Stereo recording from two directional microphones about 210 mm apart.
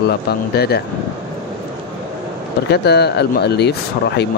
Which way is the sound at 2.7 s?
50° left (ahead or behind).